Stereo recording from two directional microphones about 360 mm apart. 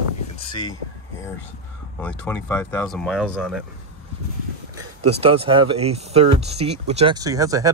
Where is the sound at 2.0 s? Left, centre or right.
Centre.